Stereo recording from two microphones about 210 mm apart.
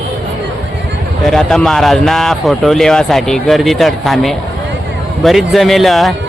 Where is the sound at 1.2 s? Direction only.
Centre (ahead or behind).